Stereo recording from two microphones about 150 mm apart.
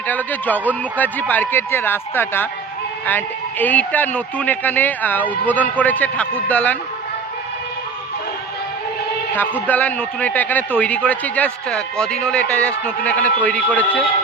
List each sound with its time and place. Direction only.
0.1 s speech: 10° left (ahead or behind)
9.6 s speech: 10° left (ahead or behind)